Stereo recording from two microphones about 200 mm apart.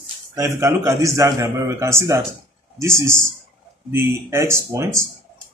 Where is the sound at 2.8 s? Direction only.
15° right (ahead or behind).